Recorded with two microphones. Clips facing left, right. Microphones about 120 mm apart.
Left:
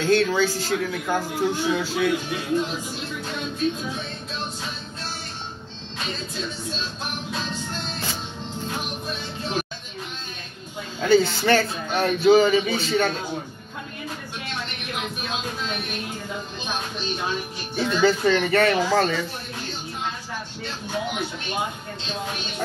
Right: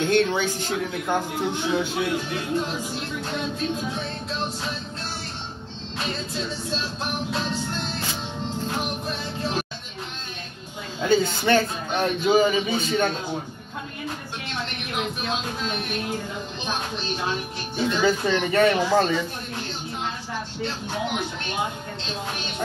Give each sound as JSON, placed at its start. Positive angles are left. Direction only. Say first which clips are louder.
{"t": 0.0, "sound": "speech", "louder": "left 1 dB", "side_deg": -20}
{"t": 11.0, "sound": "speech", "louder": "left 3 dB", "side_deg": -20}
{"t": 17.7, "sound": "speech", "louder": "left 2 dB", "side_deg": -20}